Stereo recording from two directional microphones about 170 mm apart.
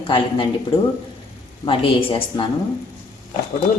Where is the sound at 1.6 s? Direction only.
30° left (ahead or behind).